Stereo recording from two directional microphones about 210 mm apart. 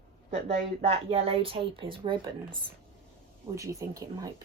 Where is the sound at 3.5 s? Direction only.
15° right (ahead or behind).